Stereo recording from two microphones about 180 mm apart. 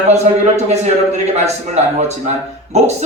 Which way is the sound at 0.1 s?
40° right (ahead or behind).